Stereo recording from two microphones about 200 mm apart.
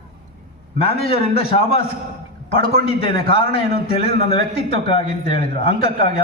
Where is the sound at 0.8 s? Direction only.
30° left (ahead or behind).